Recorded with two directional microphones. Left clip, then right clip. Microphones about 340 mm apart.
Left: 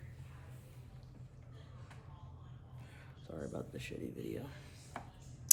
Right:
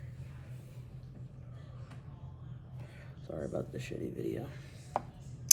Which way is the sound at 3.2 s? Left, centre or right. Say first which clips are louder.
Right 6 dB; centre.